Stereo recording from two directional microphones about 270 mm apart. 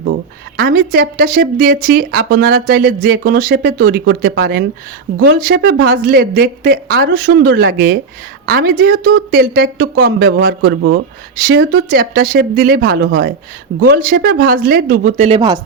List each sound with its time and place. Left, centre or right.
0.5 s a woman's voice: right; by 15.5 s centre